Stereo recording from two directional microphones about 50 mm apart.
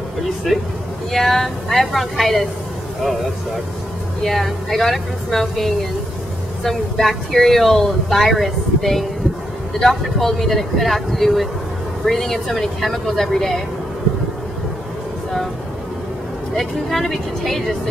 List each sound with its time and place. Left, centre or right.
0.5 s speech: centre
4.2 s speech: centre
16.5 s speech: centre